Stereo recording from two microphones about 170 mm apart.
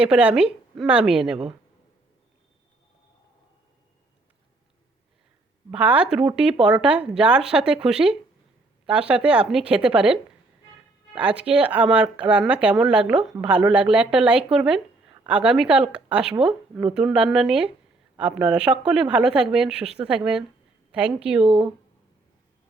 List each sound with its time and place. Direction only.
0.0 s speech: 5° right (ahead or behind)
5.7 s a woman's voice: 10° right (ahead or behind)